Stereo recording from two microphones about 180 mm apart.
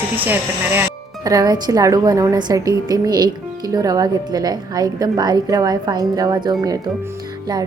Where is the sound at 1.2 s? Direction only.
20° right (ahead or behind).